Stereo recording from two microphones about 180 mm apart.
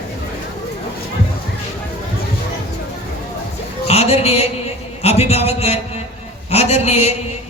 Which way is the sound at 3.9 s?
35° left (ahead or behind).